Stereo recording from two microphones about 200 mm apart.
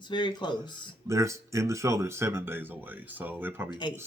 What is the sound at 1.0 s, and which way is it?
Speech, 15° right (ahead or behind).